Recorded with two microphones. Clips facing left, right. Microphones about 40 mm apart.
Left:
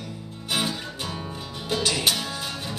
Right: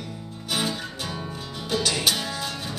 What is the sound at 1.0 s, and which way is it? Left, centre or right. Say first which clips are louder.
Music: even; centre.